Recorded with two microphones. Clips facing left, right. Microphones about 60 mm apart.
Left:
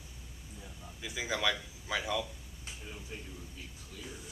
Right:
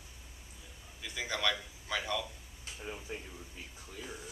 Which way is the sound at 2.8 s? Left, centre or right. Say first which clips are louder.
Right 5 dB; right.